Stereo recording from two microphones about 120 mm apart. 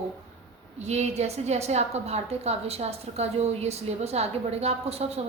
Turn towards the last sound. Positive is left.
turn(degrees=-60)  # may be behind; listen again after turning